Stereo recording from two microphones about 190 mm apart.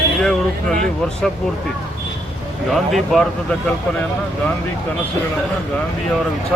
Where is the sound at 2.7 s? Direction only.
Centre (ahead or behind).